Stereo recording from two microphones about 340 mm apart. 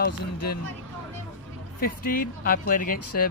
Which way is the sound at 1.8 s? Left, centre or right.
Left.